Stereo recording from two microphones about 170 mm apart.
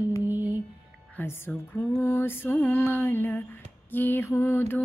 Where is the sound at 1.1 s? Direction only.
15° left (ahead or behind).